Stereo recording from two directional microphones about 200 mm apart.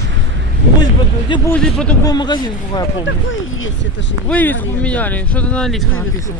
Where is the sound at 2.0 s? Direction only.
20° left (ahead or behind).